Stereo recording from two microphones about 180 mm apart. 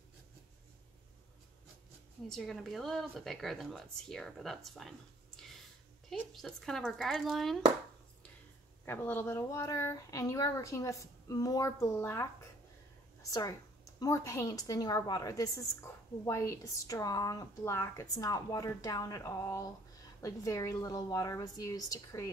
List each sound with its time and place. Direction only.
2.2 s speech: centre (ahead or behind)
8.8 s a woman's voice: 10° left (ahead or behind)